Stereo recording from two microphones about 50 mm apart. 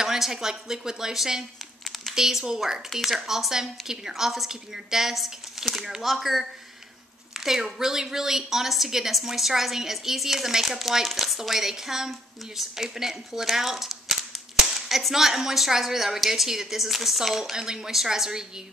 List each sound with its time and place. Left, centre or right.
0.0 s a woman's voice: centre
2.9 s a woman's voice: centre